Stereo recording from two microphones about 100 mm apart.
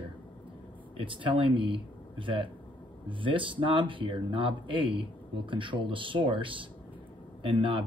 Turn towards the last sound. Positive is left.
turn(degrees=-55)  # may be behind; listen again after turning